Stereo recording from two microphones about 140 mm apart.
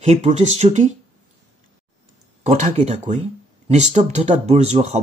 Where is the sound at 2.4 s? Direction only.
50° right (ahead or behind).